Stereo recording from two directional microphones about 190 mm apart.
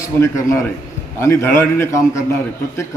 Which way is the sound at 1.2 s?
10° left (ahead or behind).